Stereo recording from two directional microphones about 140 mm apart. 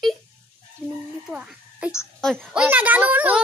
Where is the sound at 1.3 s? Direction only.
10° right (ahead or behind).